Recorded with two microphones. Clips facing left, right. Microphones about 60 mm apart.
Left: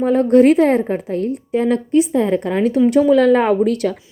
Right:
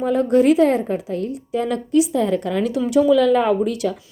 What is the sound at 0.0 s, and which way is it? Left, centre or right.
A woman's voice, left.